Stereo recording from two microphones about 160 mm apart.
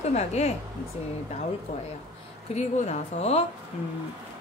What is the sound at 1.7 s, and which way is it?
A woman's voice, 50° left (ahead or behind).